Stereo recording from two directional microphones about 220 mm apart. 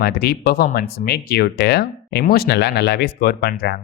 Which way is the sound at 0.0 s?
45° left (ahead or behind).